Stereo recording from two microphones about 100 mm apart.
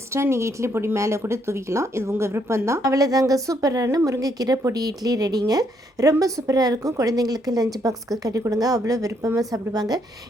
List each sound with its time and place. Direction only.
0.1 s speech: 25° right (ahead or behind)